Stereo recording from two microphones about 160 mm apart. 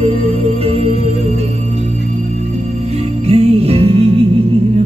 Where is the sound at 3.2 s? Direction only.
40° right (ahead or behind).